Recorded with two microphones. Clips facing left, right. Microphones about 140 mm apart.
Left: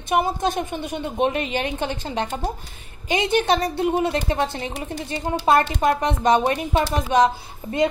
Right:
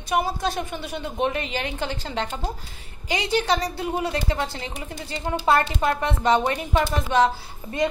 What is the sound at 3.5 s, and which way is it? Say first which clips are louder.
A woman's voice: left 4 dB; 25° left (ahead or behind).